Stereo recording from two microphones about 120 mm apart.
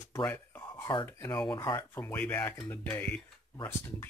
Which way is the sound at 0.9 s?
40° left (ahead or behind).